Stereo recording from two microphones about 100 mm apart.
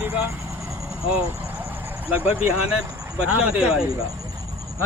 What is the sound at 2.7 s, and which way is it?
Speech, 10° right (ahead or behind).